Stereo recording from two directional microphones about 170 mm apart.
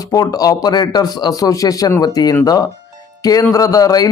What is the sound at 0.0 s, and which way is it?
A man's voice, 20° left (ahead or behind).